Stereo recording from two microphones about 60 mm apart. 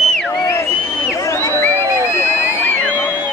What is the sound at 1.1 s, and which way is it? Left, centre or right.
Crowd, left.